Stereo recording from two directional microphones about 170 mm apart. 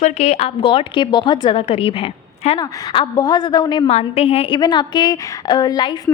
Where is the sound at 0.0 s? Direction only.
40° left (ahead or behind).